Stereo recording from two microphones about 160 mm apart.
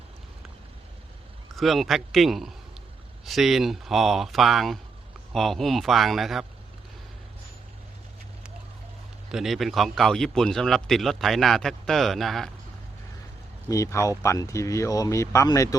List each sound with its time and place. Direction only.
1.5 s speech: centre (ahead or behind)
9.3 s speech: centre (ahead or behind)
13.7 s speech: 20° left (ahead or behind)